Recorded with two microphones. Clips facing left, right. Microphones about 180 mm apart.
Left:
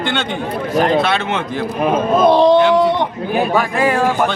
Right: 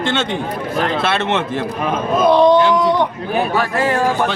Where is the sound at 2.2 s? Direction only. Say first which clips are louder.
Even; 30° left (ahead or behind).